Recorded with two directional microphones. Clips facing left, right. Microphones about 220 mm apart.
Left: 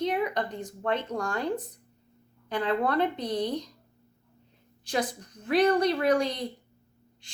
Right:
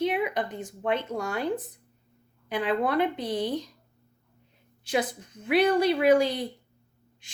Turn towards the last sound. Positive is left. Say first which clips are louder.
# right 4 dB
turn(degrees=-5)  # may be behind; listen again after turning